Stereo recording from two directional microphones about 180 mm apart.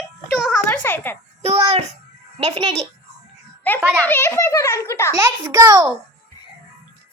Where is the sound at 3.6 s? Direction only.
10° left (ahead or behind).